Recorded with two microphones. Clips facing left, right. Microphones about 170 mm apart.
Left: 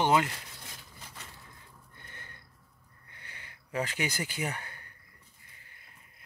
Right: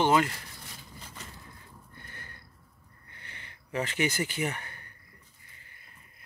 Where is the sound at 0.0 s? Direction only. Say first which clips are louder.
Right 2 dB; 15° left (ahead or behind).